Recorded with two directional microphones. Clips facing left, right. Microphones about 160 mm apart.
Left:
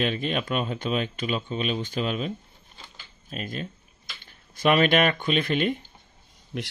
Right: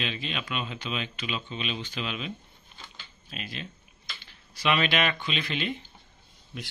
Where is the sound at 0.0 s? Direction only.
50° left (ahead or behind).